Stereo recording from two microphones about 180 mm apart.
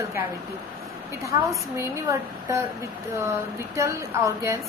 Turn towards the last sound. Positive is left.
turn(degrees=-15)  # may be behind; listen again after turning